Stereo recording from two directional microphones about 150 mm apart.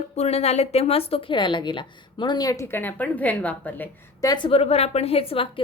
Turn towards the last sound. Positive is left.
turn(degrees=40)  # may be behind; listen again after turning